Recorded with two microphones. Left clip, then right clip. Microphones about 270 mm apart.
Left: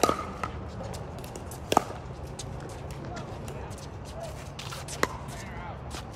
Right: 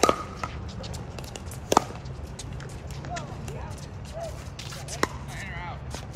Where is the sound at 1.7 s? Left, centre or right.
Centre.